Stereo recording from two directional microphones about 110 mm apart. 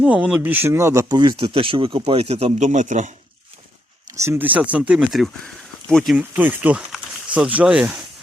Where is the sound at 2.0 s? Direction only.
70° right (ahead or behind); by 3.1 s 90° right.